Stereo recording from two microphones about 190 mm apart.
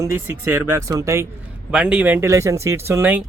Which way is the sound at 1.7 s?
5° right (ahead or behind).